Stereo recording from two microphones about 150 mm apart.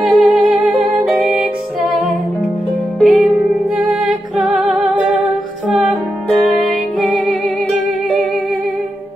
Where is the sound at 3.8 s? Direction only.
5° right (ahead or behind).